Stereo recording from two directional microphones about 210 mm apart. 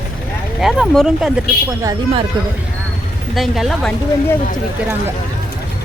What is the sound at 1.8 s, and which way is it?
Speech, 15° right (ahead or behind).